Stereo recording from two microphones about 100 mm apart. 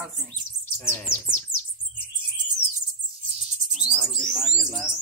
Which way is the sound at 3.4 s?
5° right (ahead or behind).